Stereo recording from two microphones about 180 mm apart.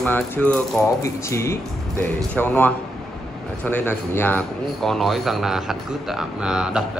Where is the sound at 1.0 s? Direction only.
15° left (ahead or behind).